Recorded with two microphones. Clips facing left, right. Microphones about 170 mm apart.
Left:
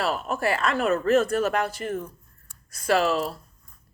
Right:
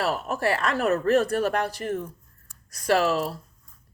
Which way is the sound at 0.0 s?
40° right (ahead or behind).